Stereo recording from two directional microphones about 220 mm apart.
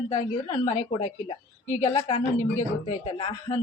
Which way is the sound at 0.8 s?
20° left (ahead or behind).